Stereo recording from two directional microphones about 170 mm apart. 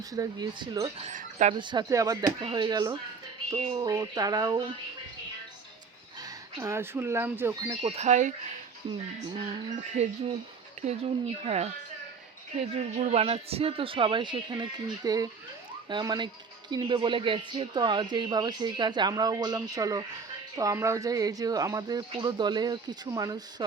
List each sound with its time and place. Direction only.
0.0 s speech: 20° right (ahead or behind)
1.0 s speech: 45° right (ahead or behind)
1.5 s speech: 25° right (ahead or behind)
6.1 s speech: 20° right (ahead or behind)
7.8 s speech: 35° right (ahead or behind)
9.9 s speech: 40° right (ahead or behind); by 23.6 s 20° right (ahead or behind)